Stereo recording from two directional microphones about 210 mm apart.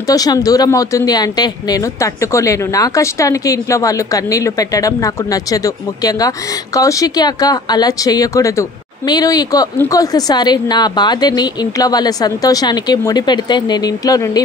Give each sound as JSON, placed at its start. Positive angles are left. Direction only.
{"t": 0.0, "sound": "speech", "side_deg": 15}